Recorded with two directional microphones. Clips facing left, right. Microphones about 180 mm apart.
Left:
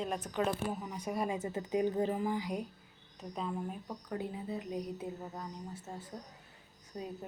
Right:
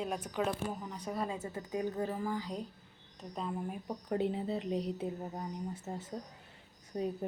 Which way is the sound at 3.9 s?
25° right (ahead or behind).